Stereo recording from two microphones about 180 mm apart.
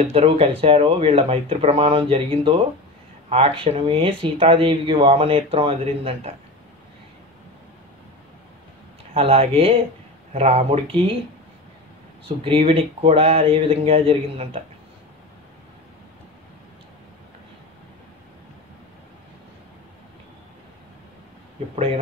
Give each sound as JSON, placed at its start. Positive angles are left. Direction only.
{"t": 0.1, "sound": "speech", "side_deg": -35}
{"t": 9.1, "sound": "speech", "side_deg": -30}
{"t": 12.4, "sound": "speech", "side_deg": -30}